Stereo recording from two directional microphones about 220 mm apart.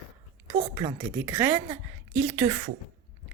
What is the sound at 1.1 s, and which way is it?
A woman's voice, 10° right (ahead or behind).